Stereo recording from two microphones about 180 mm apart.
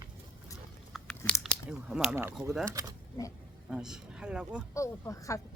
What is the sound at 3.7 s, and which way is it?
Speech, 5° right (ahead or behind).